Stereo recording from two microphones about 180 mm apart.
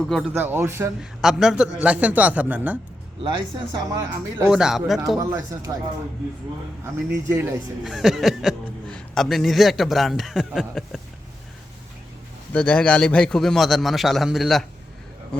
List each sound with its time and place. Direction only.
0.0 s a man's voice: 5° left (ahead or behind)
0.3 s a man's voice: 10° right (ahead or behind)
1.2 s a man's voice: centre (ahead or behind)
3.8 s speech: 20° right (ahead or behind)
4.4 s a man's voice: 5° right (ahead or behind)
5.2 s speech: 20° right (ahead or behind)
7.1 s a man's voice: 15° right (ahead or behind)
7.9 s speech: centre (ahead or behind)
12.5 s a man's voice: 5° left (ahead or behind)